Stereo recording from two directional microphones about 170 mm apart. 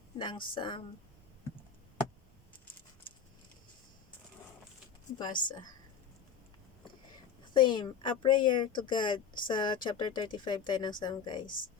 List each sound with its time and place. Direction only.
0.2 s speech: 30° left (ahead or behind)
5.1 s speech: 25° left (ahead or behind)
7.5 s speech: 30° left (ahead or behind)
11.4 s speech: 55° left (ahead or behind)